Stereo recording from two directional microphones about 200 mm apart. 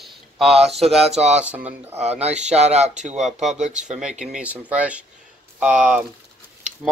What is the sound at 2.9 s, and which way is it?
Speech, 5° right (ahead or behind).